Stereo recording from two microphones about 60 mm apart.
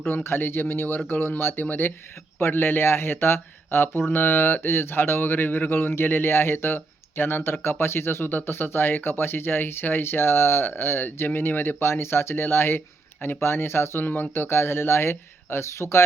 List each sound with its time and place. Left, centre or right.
0.1 s speech: left
14.0 s speech: left